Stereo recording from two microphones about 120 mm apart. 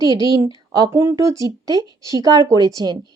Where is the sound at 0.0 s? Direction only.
30° right (ahead or behind).